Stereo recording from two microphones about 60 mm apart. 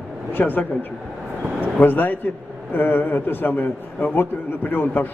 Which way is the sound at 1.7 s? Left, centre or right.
Left.